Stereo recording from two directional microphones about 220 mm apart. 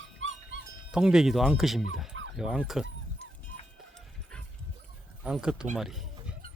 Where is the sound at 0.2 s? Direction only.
60° right (ahead or behind).